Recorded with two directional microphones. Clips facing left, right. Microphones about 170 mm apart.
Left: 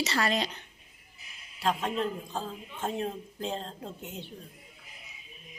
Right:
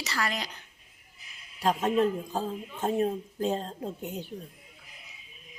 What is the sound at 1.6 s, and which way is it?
A woman's voice, 45° right (ahead or behind).